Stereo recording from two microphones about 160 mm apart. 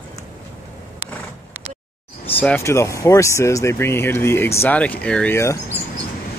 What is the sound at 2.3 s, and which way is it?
Speech, 10° left (ahead or behind).